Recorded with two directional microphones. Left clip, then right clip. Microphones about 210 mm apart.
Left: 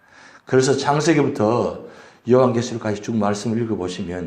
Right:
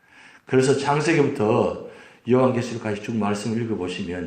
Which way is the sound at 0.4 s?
20° left (ahead or behind).